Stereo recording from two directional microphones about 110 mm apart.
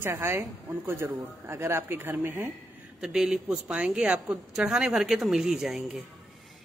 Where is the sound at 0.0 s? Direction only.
20° right (ahead or behind).